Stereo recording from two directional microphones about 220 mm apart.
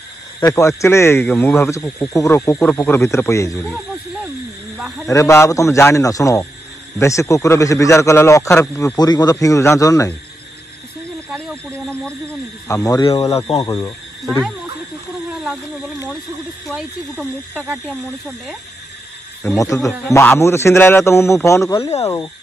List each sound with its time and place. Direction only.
0.4 s speech: 15° left (ahead or behind)
4.7 s speech: centre (ahead or behind)
5.0 s speech: 15° left (ahead or behind)
11.3 s speech: 5° left (ahead or behind)
14.2 s speech: centre (ahead or behind)
15.3 s snake: centre (ahead or behind)
16.6 s speech: centre (ahead or behind)
19.6 s speech: 15° left (ahead or behind)